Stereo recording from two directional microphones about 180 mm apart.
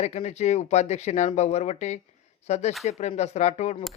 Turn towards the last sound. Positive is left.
turn(degrees=40)  # may be behind; listen again after turning